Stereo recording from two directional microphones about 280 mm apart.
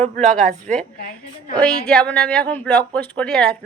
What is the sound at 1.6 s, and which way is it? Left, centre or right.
Speech, centre.